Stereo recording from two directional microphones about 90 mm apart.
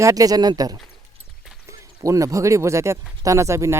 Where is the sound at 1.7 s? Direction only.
35° right (ahead or behind).